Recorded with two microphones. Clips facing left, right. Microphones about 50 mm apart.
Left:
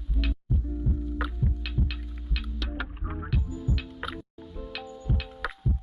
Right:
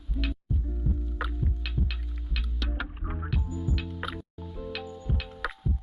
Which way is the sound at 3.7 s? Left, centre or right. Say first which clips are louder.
Even; centre.